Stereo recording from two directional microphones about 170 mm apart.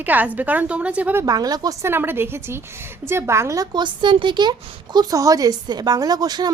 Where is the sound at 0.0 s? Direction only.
10° right (ahead or behind).